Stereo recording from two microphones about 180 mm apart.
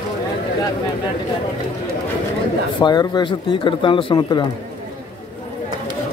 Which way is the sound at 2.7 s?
25° left (ahead or behind).